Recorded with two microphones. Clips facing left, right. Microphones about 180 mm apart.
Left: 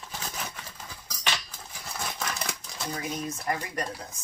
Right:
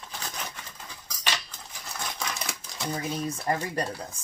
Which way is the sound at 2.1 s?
Centre (ahead or behind).